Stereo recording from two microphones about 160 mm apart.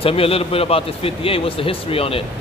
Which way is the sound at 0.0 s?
35° left (ahead or behind).